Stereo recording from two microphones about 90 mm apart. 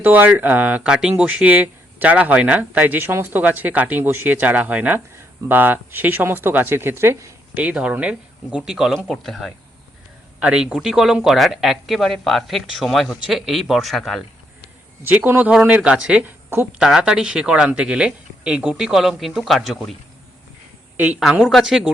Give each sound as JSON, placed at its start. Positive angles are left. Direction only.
{"t": 0.0, "sound": "speech", "side_deg": -20}
{"t": 7.5, "sound": "speech", "side_deg": -15}
{"t": 9.0, "sound": "speech", "side_deg": 5}
{"t": 10.4, "sound": "speech", "side_deg": -10}
{"t": 15.0, "sound": "speech", "side_deg": -20}
{"t": 20.9, "sound": "a woman's voice", "side_deg": -20}
{"t": 21.4, "sound": "speech", "side_deg": -5}